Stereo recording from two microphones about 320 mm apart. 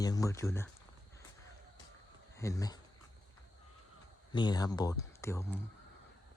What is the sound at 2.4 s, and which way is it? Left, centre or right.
Speech, centre.